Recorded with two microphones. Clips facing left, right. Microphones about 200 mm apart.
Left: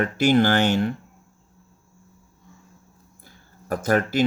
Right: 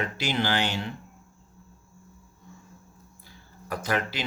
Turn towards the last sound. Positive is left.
turn(degrees=45)  # may be behind; listen again after turning